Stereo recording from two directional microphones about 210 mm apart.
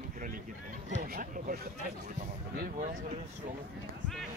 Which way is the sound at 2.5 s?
40° right (ahead or behind).